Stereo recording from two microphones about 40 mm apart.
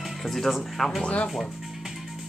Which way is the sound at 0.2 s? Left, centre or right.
Centre.